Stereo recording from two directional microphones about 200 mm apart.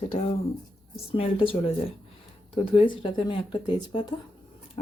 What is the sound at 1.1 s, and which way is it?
Speech, 30° left (ahead or behind).